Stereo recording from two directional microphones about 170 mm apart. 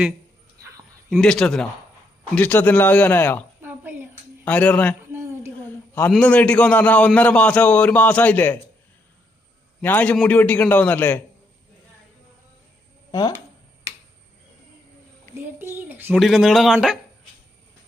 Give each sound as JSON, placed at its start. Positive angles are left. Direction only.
{"t": 1.1, "sound": "a man's voice", "side_deg": 5}
{"t": 3.6, "sound": "a sound", "side_deg": -10}
{"t": 4.4, "sound": "a man's voice", "side_deg": 10}
{"t": 5.1, "sound": "a sound", "side_deg": -15}
{"t": 5.5, "sound": "a man's voice", "side_deg": 10}
{"t": 9.8, "sound": "a man's voice", "side_deg": 10}
{"t": 13.1, "sound": "a sound", "side_deg": 25}
{"t": 15.4, "sound": "speech", "side_deg": -15}
{"t": 16.2, "sound": "a man's voice", "side_deg": 0}